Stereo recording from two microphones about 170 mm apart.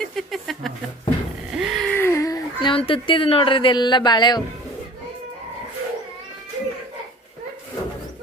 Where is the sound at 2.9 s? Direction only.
30° left (ahead or behind).